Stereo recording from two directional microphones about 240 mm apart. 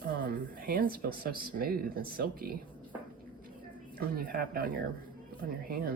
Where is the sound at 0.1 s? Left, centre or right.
Right.